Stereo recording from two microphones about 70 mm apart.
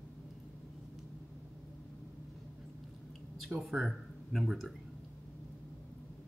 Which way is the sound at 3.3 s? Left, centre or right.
Centre.